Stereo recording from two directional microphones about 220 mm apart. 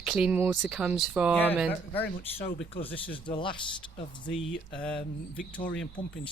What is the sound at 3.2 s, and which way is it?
Speech, 20° left (ahead or behind).